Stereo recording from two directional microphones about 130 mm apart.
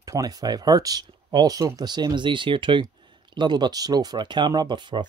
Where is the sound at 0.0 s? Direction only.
25° right (ahead or behind).